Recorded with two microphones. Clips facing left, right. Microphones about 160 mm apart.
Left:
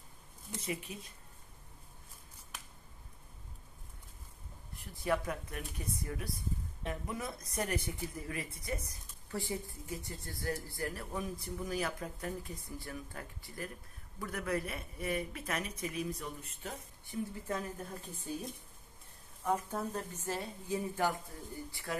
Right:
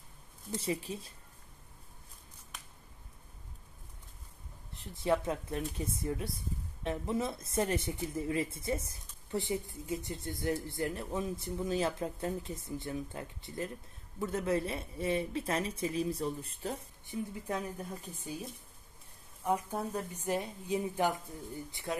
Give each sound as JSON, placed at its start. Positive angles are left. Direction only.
{"t": 0.6, "sound": "speech", "side_deg": -30}
{"t": 4.7, "sound": "a woman's voice", "side_deg": -25}
{"t": 17.3, "sound": "a woman's voice", "side_deg": -15}
{"t": 18.2, "sound": "a woman's voice", "side_deg": -5}